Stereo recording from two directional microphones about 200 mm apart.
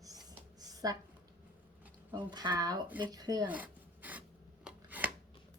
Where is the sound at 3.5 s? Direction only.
10° right (ahead or behind).